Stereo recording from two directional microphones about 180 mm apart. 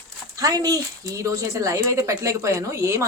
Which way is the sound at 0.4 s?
20° right (ahead or behind).